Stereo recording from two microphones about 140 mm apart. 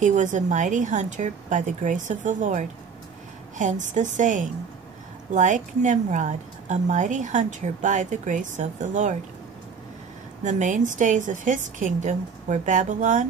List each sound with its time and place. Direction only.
0.0 s a woman's voice: 60° right (ahead or behind)
10.4 s a woman's voice: 60° right (ahead or behind)